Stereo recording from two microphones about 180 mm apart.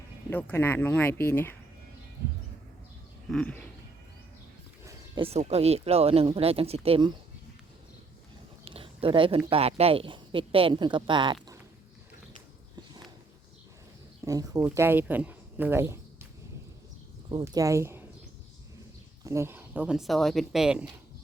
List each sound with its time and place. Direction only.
0.3 s speech: 10° left (ahead or behind)
3.2 s speech: 5° left (ahead or behind)
4.9 s speech: 30° right (ahead or behind)
8.6 s a sound: 30° right (ahead or behind)
9.5 s speech: 35° right (ahead or behind)
14.3 s speech: 20° right (ahead or behind)
17.4 s speech: 20° right (ahead or behind)
19.2 s speech: 15° right (ahead or behind)